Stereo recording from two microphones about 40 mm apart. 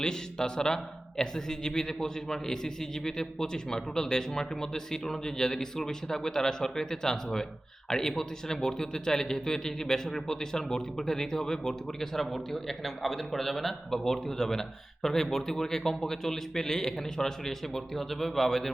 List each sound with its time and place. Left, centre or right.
0.0 s speech: centre